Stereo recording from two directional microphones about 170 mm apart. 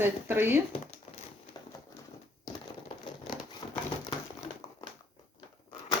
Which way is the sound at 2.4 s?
25° left (ahead or behind).